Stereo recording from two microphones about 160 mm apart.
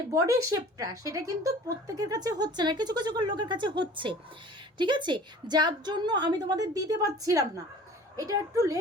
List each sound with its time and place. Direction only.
0.1 s a woman's voice: 20° right (ahead or behind)